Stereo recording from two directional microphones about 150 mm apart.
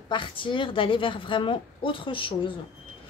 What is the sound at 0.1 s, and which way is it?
Speech, 35° left (ahead or behind).